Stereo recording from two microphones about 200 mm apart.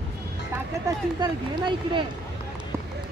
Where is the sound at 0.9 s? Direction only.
20° right (ahead or behind).